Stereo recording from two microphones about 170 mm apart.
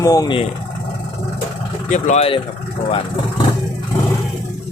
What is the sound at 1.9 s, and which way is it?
Speech, 40° left (ahead or behind).